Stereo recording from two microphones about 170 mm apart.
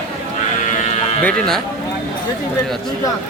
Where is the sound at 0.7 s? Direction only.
40° left (ahead or behind).